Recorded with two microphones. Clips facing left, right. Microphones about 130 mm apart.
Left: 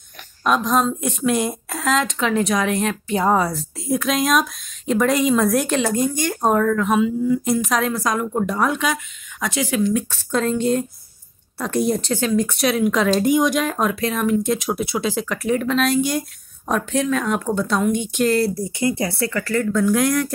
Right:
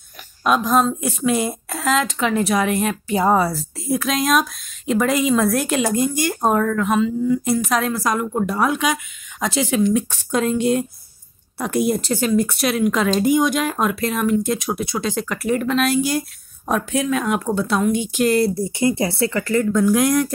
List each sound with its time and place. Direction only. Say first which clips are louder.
0.4 s speech: right 1 dB; 5° right (ahead or behind)
9.4 s speech: right 2 dB; 25° right (ahead or behind)
18.5 s speech: right 2 dB; 25° right (ahead or behind)